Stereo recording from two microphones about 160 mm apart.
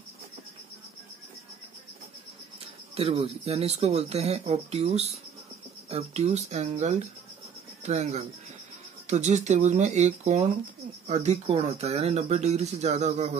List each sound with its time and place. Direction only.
2.9 s speech: 40° right (ahead or behind)